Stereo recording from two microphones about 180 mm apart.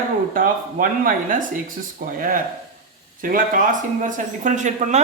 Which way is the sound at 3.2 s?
50° right (ahead or behind).